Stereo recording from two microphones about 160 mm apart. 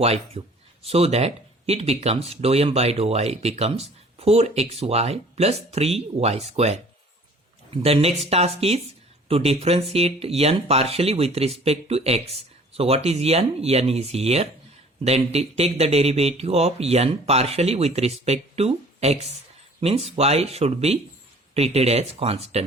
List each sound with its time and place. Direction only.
0.0 s speech: 40° right (ahead or behind)